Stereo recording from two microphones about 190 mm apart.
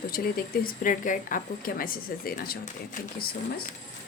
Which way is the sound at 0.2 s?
50° left (ahead or behind).